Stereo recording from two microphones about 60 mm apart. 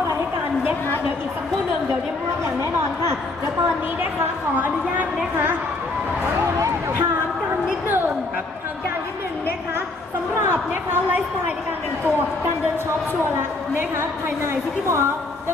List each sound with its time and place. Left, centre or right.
4.6 s a woman's voice: right
10.5 s a woman's voice: right
13.7 s a woman's voice: right